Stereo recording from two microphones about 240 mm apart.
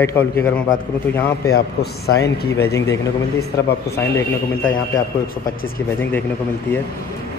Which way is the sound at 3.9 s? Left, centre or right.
Centre.